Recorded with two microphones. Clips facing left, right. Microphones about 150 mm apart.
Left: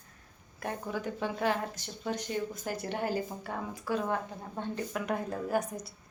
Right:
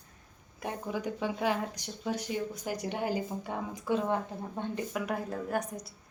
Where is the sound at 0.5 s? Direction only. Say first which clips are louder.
Even; 15° right (ahead or behind).